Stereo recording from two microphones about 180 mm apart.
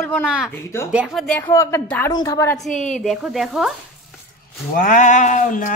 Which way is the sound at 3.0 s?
Centre (ahead or behind).